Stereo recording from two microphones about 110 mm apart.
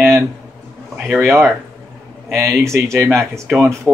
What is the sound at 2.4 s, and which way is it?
Speech, 25° right (ahead or behind).